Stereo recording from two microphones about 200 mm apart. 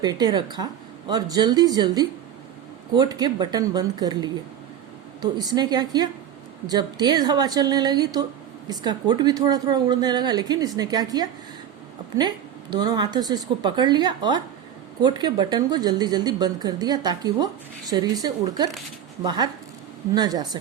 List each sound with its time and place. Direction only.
0.0 s a woman's voice: 20° right (ahead or behind)
12.8 s a woman's voice: 20° right (ahead or behind)